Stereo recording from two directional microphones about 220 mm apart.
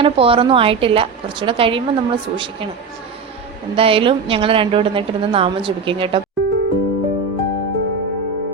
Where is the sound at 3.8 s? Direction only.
25° right (ahead or behind).